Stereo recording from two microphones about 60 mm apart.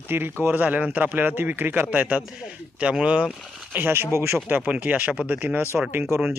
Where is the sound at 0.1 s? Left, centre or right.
Right.